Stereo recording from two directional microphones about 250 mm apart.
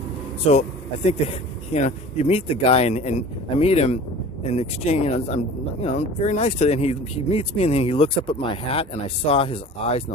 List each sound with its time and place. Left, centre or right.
0.4 s speech: left